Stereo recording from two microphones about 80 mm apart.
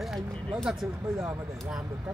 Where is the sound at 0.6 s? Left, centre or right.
Centre.